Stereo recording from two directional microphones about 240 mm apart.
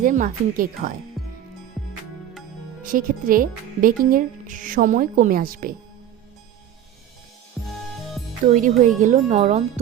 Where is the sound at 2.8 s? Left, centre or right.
Right.